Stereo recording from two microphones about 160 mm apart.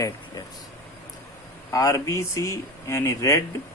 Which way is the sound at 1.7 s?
20° left (ahead or behind).